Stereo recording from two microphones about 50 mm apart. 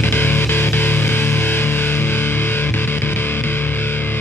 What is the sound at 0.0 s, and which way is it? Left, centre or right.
Music, left.